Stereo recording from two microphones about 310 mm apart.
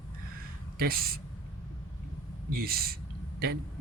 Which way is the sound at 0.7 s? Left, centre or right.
Right.